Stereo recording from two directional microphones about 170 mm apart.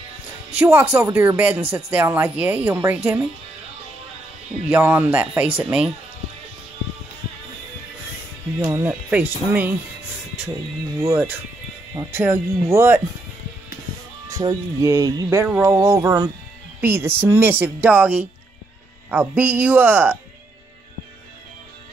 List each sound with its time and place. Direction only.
0.6 s speech: 10° right (ahead or behind)
4.6 s speech: 10° right (ahead or behind)
8.6 s speech: 20° right (ahead or behind)
9.1 s speech: 10° right (ahead or behind)
11.0 s speech: 15° right (ahead or behind)
14.3 s speech: 20° right (ahead or behind)